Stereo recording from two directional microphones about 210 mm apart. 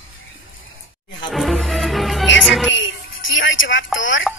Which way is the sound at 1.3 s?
Centre (ahead or behind).